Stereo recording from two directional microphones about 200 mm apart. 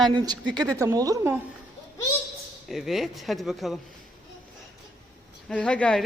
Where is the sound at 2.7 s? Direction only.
Centre (ahead or behind).